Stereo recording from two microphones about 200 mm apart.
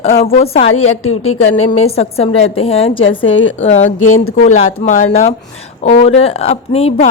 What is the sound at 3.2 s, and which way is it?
Speech, 75° left (ahead or behind).